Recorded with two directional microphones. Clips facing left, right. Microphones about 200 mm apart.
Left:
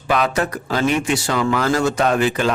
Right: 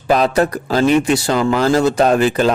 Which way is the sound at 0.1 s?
35° right (ahead or behind).